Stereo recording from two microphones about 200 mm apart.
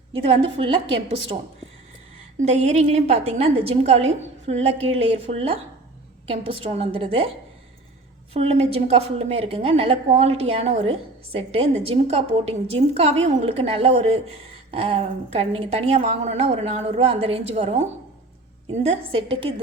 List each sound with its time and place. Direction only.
0.3 s a woman's voice: 25° right (ahead or behind)
2.4 s a woman's voice: 30° right (ahead or behind)
8.3 s a woman's voice: 30° right (ahead or behind)